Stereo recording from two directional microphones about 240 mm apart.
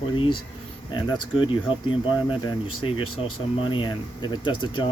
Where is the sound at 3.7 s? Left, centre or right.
Centre.